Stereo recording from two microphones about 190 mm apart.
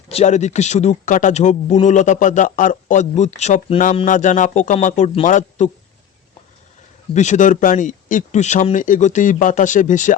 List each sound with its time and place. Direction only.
0.1 s a man's voice: 35° left (ahead or behind)
7.1 s a man's voice: 40° left (ahead or behind)